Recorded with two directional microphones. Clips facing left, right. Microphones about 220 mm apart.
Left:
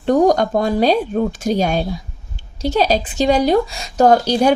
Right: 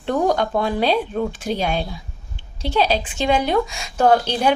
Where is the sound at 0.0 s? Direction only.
40° left (ahead or behind).